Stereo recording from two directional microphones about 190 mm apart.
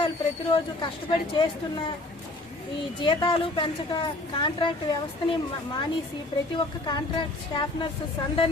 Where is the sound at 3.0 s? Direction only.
25° left (ahead or behind).